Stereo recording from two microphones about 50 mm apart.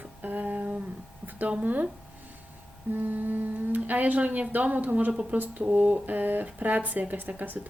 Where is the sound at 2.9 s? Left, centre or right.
Right.